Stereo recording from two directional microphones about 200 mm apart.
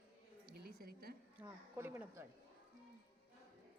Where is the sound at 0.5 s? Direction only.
50° right (ahead or behind).